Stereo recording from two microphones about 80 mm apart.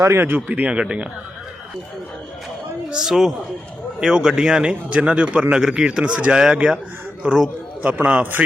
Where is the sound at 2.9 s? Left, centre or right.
Centre.